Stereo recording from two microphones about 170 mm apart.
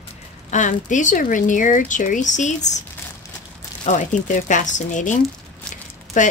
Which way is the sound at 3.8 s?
45° left (ahead or behind).